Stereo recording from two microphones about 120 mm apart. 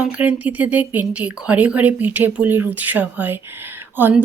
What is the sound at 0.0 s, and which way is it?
Speech, 15° right (ahead or behind).